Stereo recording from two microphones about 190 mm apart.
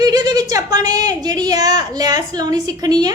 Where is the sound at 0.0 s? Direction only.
20° right (ahead or behind).